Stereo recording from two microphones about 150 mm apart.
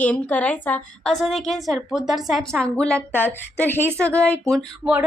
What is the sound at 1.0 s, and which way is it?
A woman's voice, centre (ahead or behind).